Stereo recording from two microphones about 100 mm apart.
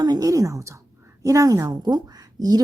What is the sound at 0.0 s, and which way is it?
A woman's voice, 40° right (ahead or behind).